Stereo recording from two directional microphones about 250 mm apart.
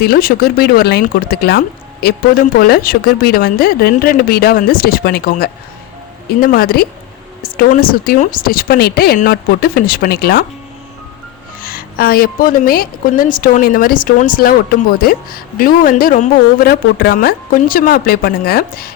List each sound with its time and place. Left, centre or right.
0.0 s speech: left
11.6 s a woman's voice: left